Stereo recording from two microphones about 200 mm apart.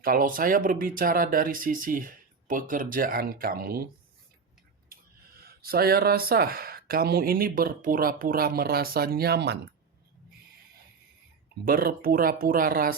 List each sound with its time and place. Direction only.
0.0 s speech: 45° right (ahead or behind)
5.4 s speech: 50° right (ahead or behind)
11.6 s speech: 50° right (ahead or behind)